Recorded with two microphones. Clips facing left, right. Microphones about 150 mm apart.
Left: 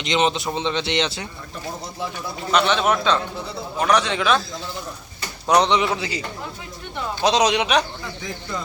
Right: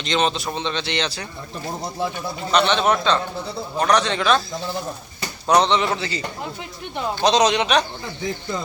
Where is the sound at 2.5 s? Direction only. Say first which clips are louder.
Right 1 dB; 5° left (ahead or behind).